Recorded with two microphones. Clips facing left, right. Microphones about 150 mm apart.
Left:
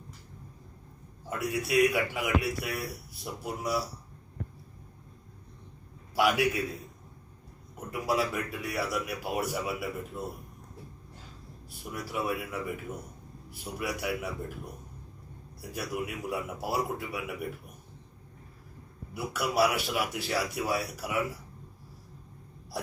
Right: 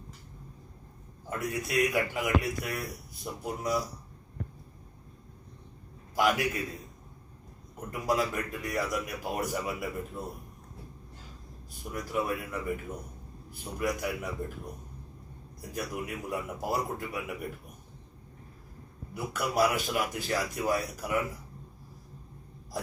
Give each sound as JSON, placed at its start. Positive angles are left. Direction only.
{"t": 1.4, "sound": "speech", "side_deg": 5}
{"t": 6.1, "sound": "a man's voice", "side_deg": 5}
{"t": 7.9, "sound": "speech", "side_deg": 5}
{"t": 11.9, "sound": "a man's voice", "side_deg": 5}
{"t": 15.7, "sound": "speech", "side_deg": 5}
{"t": 19.1, "sound": "a man's voice", "side_deg": 5}